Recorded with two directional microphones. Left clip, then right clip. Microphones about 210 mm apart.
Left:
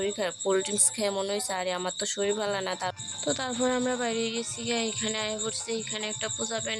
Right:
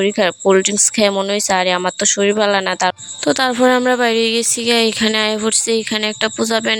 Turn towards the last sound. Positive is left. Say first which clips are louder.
# right 15 dB
turn(degrees=-50)  # may be behind; listen again after turning